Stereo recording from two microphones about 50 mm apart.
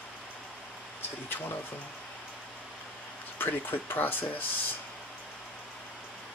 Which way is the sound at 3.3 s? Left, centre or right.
Left.